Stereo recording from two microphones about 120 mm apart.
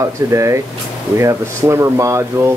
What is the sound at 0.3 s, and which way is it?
Speech, 25° right (ahead or behind).